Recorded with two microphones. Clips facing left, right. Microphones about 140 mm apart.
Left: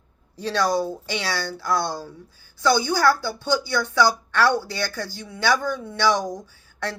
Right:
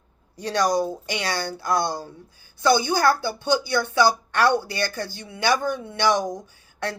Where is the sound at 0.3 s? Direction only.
15° right (ahead or behind).